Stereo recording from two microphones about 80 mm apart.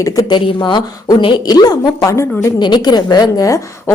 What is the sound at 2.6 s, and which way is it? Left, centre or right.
A woman's voice, left.